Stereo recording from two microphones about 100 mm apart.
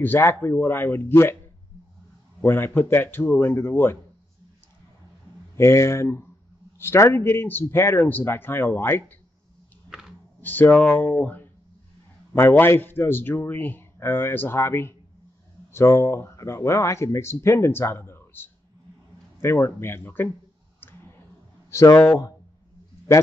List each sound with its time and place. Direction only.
0.0 s speech: 20° left (ahead or behind)
2.4 s speech: 20° left (ahead or behind)
5.6 s speech: 25° left (ahead or behind)
9.8 s a sound: 5° right (ahead or behind)
10.4 s speech: 20° left (ahead or behind)
21.6 s a sound: 30° left (ahead or behind)